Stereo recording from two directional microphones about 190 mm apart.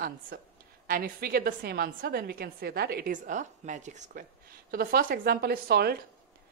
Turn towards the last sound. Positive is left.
turn(degrees=-55)  # may be behind; listen again after turning